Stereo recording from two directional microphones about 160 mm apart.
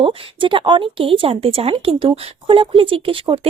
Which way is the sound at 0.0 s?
30° right (ahead or behind).